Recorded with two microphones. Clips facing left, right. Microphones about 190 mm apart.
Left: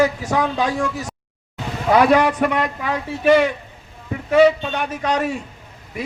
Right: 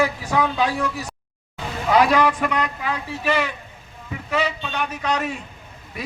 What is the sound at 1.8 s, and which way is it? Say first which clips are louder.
A man's voice: left 3 dB; 50° left (ahead or behind).